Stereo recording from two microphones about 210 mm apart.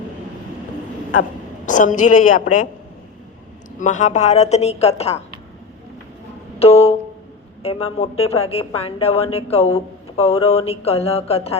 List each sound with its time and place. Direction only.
1.6 s a woman's voice: 35° left (ahead or behind)
3.8 s a woman's voice: 35° left (ahead or behind)
6.6 s music: 30° left (ahead or behind)
7.6 s a woman's voice: 25° left (ahead or behind)